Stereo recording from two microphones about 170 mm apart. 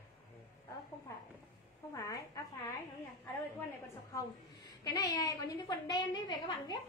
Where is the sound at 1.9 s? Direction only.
20° left (ahead or behind).